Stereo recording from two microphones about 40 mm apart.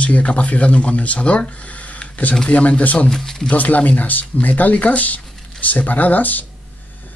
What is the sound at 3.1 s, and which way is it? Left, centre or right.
Speech, centre.